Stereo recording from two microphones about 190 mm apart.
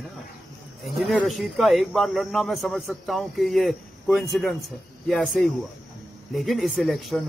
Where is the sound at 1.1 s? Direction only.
Centre (ahead or behind).